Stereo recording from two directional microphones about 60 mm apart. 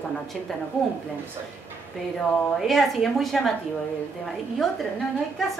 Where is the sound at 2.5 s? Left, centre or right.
Centre.